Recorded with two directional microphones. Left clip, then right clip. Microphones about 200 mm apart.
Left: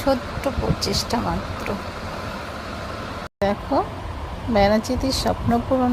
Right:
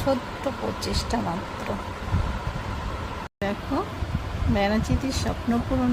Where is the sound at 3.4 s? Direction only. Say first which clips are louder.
Left 8 dB; 10° left (ahead or behind).